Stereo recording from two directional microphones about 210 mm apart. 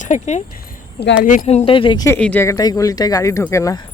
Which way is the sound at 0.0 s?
35° left (ahead or behind).